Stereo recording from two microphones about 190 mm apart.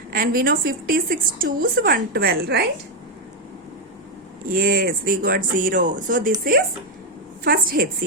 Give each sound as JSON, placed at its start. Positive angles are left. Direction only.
{"t": 0.1, "sound": "a woman's voice", "side_deg": -50}
{"t": 4.4, "sound": "a woman's voice", "side_deg": -50}